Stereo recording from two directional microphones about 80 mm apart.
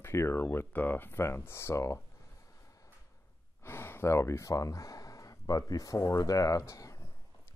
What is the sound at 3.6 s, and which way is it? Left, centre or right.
Speech, left.